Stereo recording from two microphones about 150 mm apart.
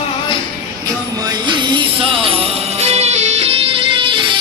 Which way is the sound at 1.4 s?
30° right (ahead or behind).